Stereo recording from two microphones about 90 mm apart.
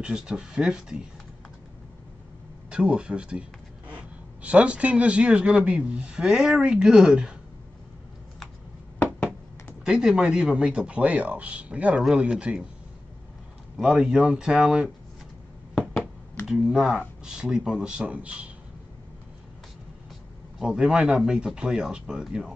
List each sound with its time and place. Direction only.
0.0 s speech: 10° right (ahead or behind)
2.7 s a man's voice: 10° right (ahead or behind)
9.0 s a sound: 15° left (ahead or behind)
9.8 s speech: 5° right (ahead or behind)
13.7 s speech: 5° right (ahead or behind)
16.4 s speech: 5° right (ahead or behind)
20.5 s speech: 5° right (ahead or behind)